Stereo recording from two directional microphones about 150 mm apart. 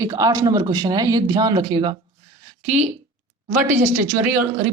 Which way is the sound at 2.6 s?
50° right (ahead or behind).